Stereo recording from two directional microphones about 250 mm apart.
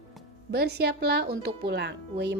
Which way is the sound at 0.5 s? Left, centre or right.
Right.